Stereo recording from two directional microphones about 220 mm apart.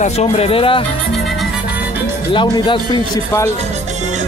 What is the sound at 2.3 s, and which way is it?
Speech, 20° left (ahead or behind).